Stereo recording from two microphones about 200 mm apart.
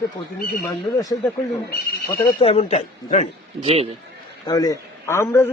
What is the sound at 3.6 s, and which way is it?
Speech, 30° right (ahead or behind).